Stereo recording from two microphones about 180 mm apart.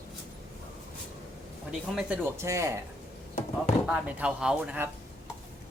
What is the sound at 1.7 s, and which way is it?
Speech, 5° right (ahead or behind).